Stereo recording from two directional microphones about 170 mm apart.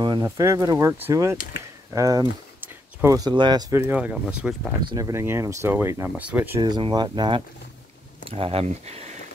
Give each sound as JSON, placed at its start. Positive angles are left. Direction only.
{"t": 0.0, "sound": "speech", "side_deg": -25}
{"t": 3.7, "sound": "speech", "side_deg": -10}
{"t": 4.8, "sound": "speech", "side_deg": -20}
{"t": 6.6, "sound": "speech", "side_deg": -25}